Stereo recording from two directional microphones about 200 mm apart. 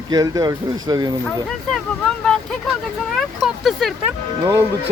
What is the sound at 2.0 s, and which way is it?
Vehicle, 5° left (ahead or behind).